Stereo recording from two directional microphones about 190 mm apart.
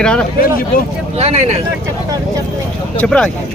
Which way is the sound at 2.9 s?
5° left (ahead or behind).